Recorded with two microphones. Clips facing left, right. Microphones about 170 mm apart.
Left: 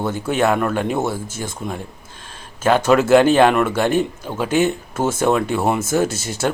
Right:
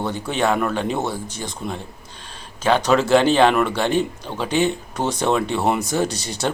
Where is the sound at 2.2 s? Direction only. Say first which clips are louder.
Left 1 dB; 50° left (ahead or behind).